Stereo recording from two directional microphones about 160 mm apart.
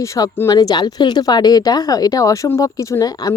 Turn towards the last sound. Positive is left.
turn(degrees=20)  # may be behind; listen again after turning